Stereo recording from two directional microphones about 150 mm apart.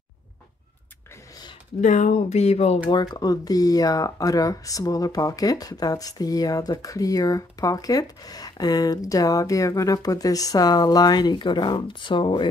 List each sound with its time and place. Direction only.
1.8 s speech: 55° left (ahead or behind)
2.9 s speech: 30° left (ahead or behind)